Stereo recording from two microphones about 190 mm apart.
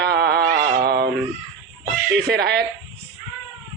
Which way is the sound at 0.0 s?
60° right (ahead or behind).